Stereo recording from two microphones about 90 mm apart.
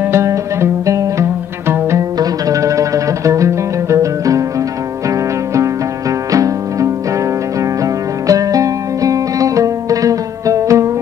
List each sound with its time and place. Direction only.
0.0 s music: 30° right (ahead or behind)
6.3 s music: 40° right (ahead or behind)